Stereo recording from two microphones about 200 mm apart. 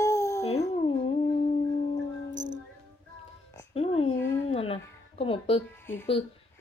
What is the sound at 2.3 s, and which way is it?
Music, 65° right (ahead or behind).